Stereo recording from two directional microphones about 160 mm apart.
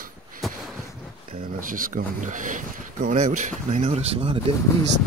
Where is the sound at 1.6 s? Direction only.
60° right (ahead or behind); by 4.3 s 40° right (ahead or behind).